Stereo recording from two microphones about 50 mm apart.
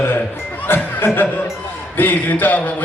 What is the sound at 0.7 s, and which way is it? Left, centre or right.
A man's voice, left.